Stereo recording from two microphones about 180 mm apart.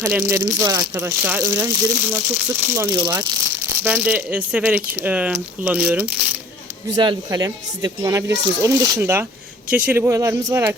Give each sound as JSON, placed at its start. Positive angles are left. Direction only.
{"t": 0.0, "sound": "speech", "side_deg": -5}
{"t": 3.8, "sound": "speech", "side_deg": -10}
{"t": 6.9, "sound": "speech", "side_deg": -25}